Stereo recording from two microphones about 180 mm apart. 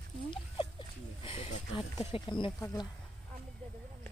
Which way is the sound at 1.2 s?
30° left (ahead or behind).